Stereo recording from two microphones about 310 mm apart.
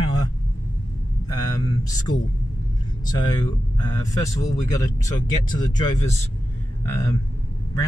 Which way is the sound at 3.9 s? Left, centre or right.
Centre.